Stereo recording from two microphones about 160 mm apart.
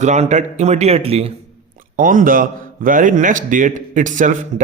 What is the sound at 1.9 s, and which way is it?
A man's voice, 55° right (ahead or behind).